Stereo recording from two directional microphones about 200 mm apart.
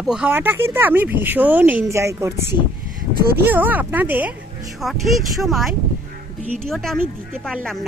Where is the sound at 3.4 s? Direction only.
10° right (ahead or behind).